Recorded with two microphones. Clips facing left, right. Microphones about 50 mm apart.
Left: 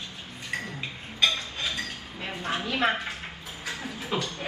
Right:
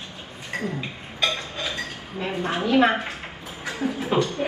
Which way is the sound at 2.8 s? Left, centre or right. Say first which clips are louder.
Right 6 dB; right.